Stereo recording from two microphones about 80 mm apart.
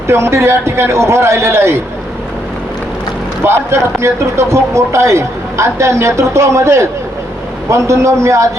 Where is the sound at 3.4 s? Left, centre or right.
Right.